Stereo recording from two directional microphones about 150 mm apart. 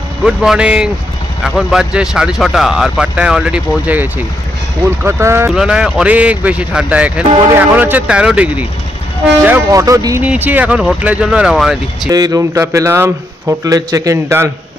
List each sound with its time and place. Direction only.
0.2 s speech: 5° right (ahead or behind)
5.5 s speech: 5° right (ahead or behind)
9.7 s speech: 20° right (ahead or behind)
10.2 s speech: 10° right (ahead or behind)
12.1 s speech: 25° right (ahead or behind)